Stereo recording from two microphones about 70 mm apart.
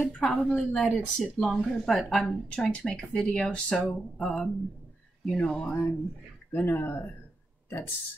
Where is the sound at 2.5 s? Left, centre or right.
Centre.